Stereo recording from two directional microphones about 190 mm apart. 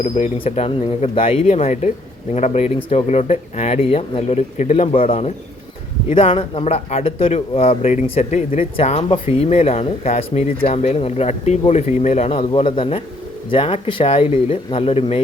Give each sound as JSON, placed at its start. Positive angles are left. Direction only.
{"t": 0.0, "sound": "speech", "side_deg": 30}